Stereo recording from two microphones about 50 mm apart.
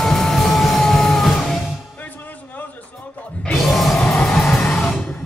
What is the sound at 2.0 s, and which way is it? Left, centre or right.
Music, left.